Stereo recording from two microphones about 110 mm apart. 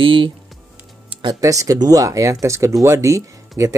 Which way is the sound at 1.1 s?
45° right (ahead or behind).